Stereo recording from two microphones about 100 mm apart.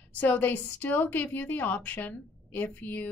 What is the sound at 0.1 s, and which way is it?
A woman's voice, 15° left (ahead or behind).